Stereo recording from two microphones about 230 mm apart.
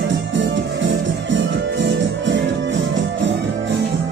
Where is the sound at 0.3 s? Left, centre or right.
Right.